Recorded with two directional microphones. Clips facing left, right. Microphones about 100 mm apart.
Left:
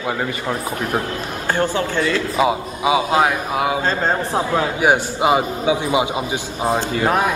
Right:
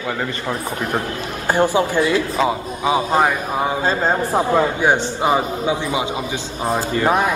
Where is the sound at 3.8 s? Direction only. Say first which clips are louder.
Right 1 dB; 10° right (ahead or behind).